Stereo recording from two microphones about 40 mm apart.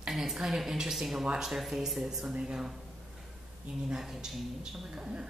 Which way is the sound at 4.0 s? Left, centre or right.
Centre.